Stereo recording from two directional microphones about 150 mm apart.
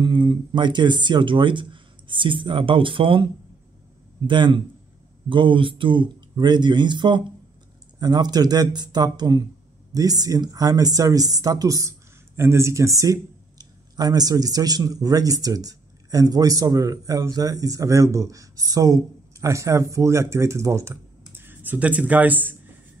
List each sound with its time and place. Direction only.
0.0 s speech: 30° right (ahead or behind)
4.3 s speech: 30° right (ahead or behind); by 22.6 s 10° right (ahead or behind)